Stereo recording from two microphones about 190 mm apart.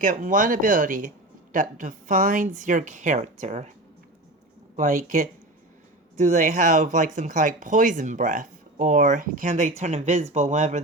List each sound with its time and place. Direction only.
0.0 s a woman's voice: 45° right (ahead or behind)
4.8 s speech: 40° right (ahead or behind)